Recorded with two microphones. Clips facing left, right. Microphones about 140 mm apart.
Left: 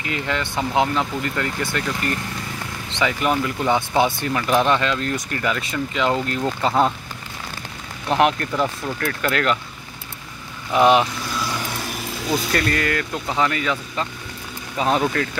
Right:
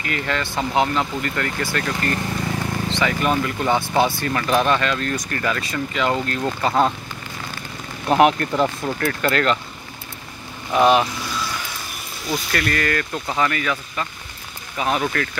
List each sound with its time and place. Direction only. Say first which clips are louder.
0.0 s speech: even; 20° left (ahead or behind)
8.1 s speech: right 3 dB; 5° right (ahead or behind)
9.2 s speech: right 1 dB; 10° left (ahead or behind)
10.7 s speech: even; 15° left (ahead or behind)
12.3 s speech: left 2 dB; 30° left (ahead or behind)